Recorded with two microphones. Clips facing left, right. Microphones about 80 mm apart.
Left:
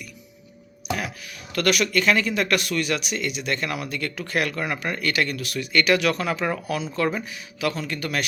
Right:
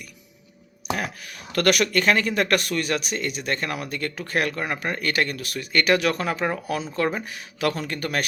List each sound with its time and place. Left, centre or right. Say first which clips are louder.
0.9 s speech: right 1 dB; right
7.3 s speech: right 1 dB; right